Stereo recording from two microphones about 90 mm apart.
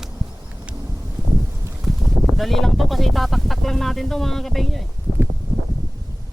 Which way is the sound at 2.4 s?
Centre (ahead or behind).